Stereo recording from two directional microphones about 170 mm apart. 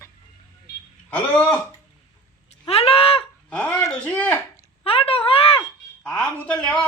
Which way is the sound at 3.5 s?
5° left (ahead or behind).